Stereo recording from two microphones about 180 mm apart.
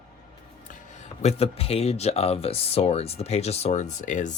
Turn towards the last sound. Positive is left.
turn(degrees=40)  # may be behind; listen again after turning